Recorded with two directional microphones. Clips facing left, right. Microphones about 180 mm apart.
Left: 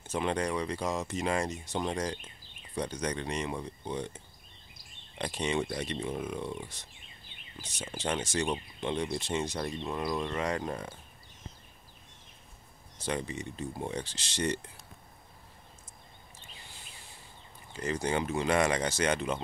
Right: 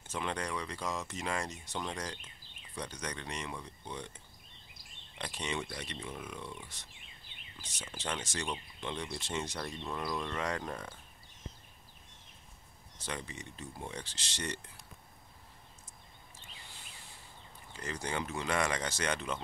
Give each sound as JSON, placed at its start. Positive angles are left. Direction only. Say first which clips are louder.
{"t": 0.1, "sound": "speech", "louder": "left 6 dB", "side_deg": 25}
{"t": 5.4, "sound": "speech", "louder": "left 7 dB", "side_deg": 25}
{"t": 7.8, "sound": "speech", "louder": "left 6 dB", "side_deg": 35}
{"t": 13.0, "sound": "speech", "louder": "left 8 dB", "side_deg": 25}
{"t": 14.1, "sound": "speech", "louder": "left 8 dB", "side_deg": 15}
{"t": 17.8, "sound": "speech", "louder": "left 7 dB", "side_deg": 20}